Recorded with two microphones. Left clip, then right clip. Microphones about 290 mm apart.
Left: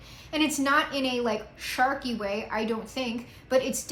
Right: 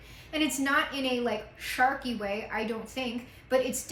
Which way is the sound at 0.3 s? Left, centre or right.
Centre.